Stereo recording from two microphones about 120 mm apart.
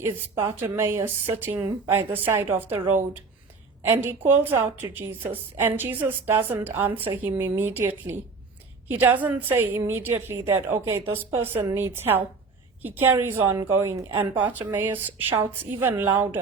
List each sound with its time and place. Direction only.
0.0 s a woman's voice: 20° right (ahead or behind)